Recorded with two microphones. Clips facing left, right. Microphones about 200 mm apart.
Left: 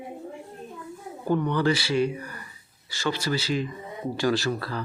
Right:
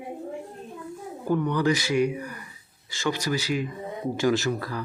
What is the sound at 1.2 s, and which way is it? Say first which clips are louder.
Speech: even; 10° right (ahead or behind).